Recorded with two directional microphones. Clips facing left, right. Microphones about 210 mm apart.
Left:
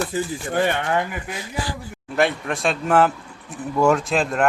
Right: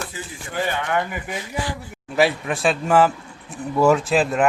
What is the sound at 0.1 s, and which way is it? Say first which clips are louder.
Speech: left 9 dB; 45° left (ahead or behind).